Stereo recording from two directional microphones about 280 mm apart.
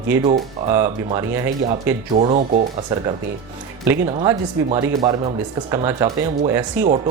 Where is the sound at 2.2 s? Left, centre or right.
Right.